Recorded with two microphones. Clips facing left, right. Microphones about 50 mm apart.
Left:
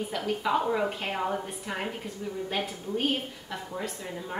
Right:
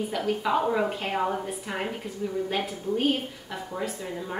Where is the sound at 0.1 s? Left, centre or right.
Centre.